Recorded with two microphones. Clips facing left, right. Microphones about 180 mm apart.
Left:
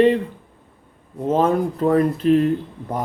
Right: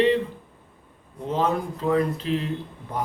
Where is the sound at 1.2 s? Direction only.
50° left (ahead or behind).